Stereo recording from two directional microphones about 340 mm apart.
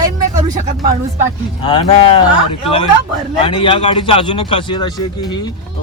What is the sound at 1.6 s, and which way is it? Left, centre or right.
Speech, centre.